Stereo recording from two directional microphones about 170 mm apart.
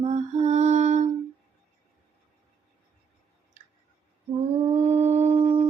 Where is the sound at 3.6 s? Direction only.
45° right (ahead or behind).